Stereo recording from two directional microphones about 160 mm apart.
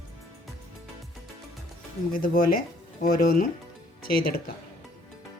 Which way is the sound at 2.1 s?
65° left (ahead or behind).